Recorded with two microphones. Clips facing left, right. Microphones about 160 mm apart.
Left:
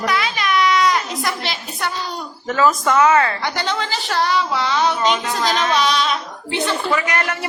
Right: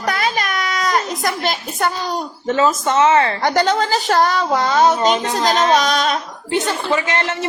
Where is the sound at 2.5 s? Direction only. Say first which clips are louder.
Even; 25° right (ahead or behind).